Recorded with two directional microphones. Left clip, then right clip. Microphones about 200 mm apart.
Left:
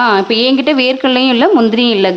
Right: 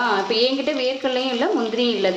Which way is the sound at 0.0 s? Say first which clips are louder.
Left 8 dB; 60° left (ahead or behind).